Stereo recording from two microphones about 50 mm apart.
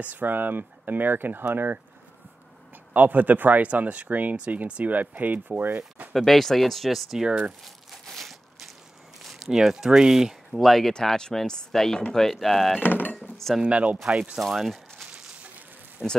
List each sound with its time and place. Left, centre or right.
0.0 s speech: right
2.9 s speech: right
6.1 s speech: centre
7.2 s speech: right
7.6 s a sound: centre
9.2 s speech: centre
10.5 s speech: centre
10.9 s speech: centre
12.8 s a sound: left
13.7 s speech: right
14.5 s speech: centre
16.0 s speech: centre